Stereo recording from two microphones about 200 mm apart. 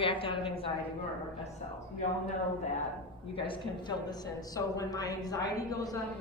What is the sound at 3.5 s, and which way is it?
A woman's voice, 20° left (ahead or behind).